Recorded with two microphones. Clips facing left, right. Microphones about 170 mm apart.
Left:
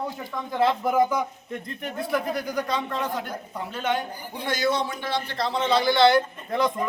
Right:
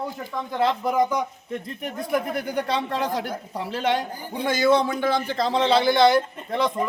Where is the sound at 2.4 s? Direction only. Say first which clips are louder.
Right 2 dB; 30° right (ahead or behind).